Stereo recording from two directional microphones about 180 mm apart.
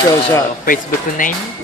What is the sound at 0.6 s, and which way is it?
Speech, 50° left (ahead or behind).